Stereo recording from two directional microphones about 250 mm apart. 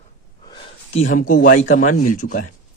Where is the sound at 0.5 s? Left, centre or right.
Left.